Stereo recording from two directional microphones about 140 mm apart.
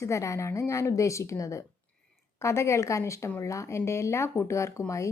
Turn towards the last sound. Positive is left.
turn(degrees=20)  # may be behind; listen again after turning